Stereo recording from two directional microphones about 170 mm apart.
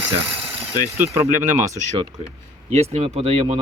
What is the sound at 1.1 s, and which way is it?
Speech, 50° right (ahead or behind).